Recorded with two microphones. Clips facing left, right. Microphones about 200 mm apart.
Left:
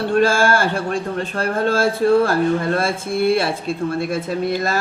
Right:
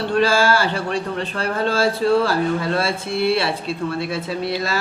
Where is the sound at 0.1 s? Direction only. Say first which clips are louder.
Left 1 dB; 50° left (ahead or behind).